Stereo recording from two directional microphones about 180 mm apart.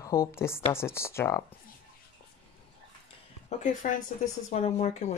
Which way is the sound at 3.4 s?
45° left (ahead or behind).